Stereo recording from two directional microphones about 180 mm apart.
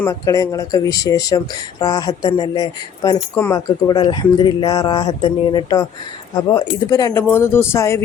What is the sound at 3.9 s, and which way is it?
Speech, 25° left (ahead or behind).